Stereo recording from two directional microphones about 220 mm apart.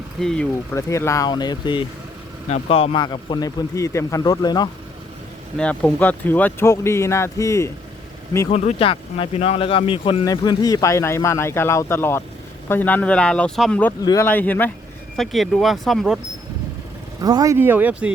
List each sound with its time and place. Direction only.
0.2 s a man's voice: 5° left (ahead or behind)
5.5 s speech: 5° left (ahead or behind)
8.4 s speech: 30° left (ahead or behind); by 16.2 s centre (ahead or behind)
17.2 s speech: 15° right (ahead or behind)